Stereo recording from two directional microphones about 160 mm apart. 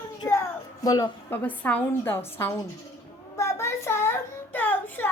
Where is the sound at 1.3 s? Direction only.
10° left (ahead or behind).